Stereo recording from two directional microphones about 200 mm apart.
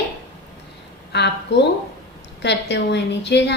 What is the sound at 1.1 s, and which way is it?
A woman's voice, 60° left (ahead or behind).